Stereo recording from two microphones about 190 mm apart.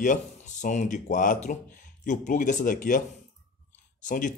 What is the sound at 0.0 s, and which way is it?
Speech, 40° left (ahead or behind).